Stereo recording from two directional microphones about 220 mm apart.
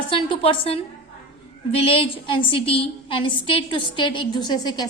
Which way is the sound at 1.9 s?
25° left (ahead or behind).